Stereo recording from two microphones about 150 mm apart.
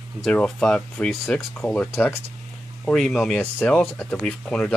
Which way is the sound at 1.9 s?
15° left (ahead or behind).